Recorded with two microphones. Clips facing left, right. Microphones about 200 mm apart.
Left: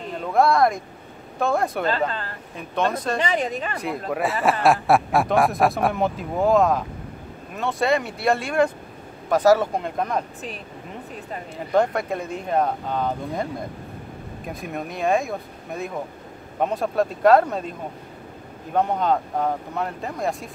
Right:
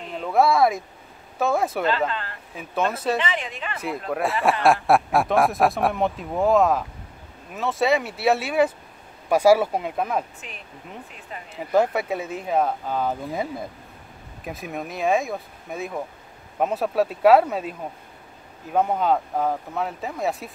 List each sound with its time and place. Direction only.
0.2 s speech: 5° right (ahead or behind)
1.9 s a woman's voice: 40° left (ahead or behind)
2.5 s speech: 5° right (ahead or behind)
3.2 s a woman's voice: 40° left (ahead or behind)
3.8 s speech: centre (ahead or behind)
11.7 s speech: 5° right (ahead or behind)